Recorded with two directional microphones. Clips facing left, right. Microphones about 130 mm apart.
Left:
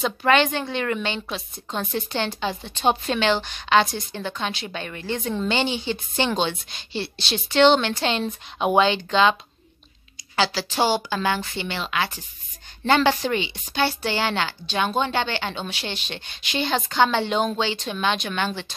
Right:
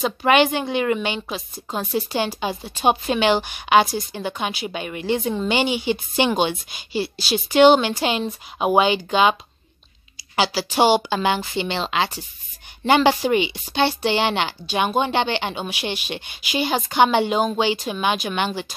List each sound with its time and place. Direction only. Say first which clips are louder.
0.2 s a woman's voice: right 3 dB; 15° right (ahead or behind)
12.8 s a woman's voice: right 3 dB; 15° right (ahead or behind)